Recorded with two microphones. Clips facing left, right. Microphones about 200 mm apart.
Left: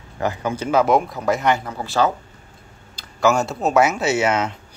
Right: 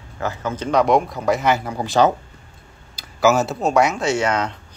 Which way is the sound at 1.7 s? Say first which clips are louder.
Right 3 dB; 15° right (ahead or behind).